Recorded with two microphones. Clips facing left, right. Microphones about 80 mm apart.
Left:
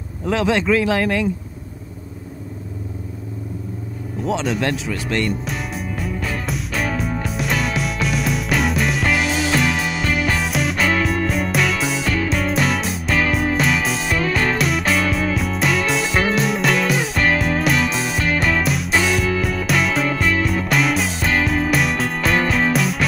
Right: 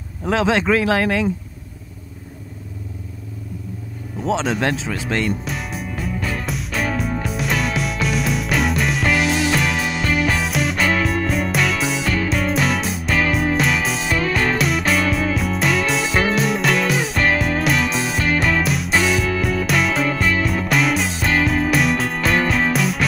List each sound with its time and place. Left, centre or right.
0.2 s speech: centre
4.2 s speech: centre
5.2 s music: centre